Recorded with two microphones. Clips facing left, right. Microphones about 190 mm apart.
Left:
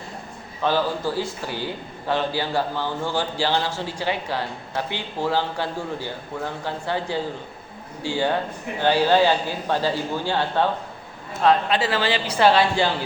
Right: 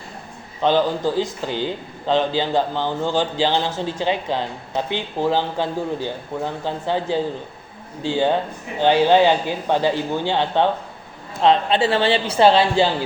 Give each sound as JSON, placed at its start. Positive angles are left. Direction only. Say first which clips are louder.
{"t": 0.6, "sound": "a man's voice", "louder": "right 4 dB", "side_deg": -20}